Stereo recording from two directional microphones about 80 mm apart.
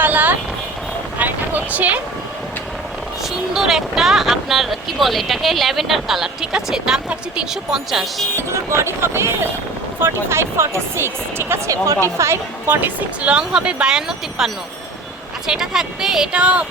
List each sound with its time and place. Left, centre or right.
0.0 s vehicle: right
1.2 s a sound: centre
3.5 s speech: centre
8.4 s speech: right
12.6 s speech: right
13.2 s speech: centre